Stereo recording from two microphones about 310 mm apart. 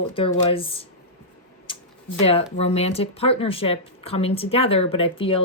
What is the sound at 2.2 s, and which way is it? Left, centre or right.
Speech, centre.